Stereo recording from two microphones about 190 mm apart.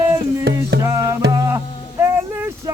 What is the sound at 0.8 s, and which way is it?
Music, 15° right (ahead or behind).